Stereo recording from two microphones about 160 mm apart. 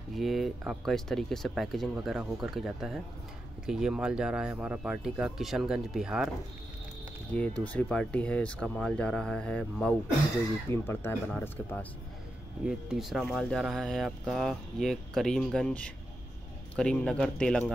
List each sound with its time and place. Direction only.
0.1 s speech: centre (ahead or behind)
7.3 s speech: 10° left (ahead or behind)
12.6 s speech: centre (ahead or behind)